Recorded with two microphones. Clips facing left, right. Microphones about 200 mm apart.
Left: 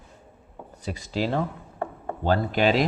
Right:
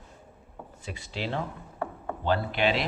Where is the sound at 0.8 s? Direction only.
40° left (ahead or behind).